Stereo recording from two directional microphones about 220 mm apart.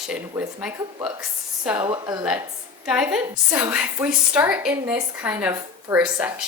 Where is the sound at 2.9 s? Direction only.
5° right (ahead or behind).